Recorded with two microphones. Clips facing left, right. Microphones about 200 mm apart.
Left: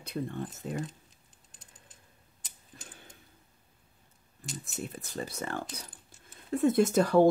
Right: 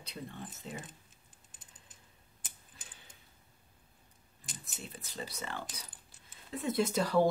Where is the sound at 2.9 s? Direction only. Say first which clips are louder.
Left 7 dB; 50° left (ahead or behind).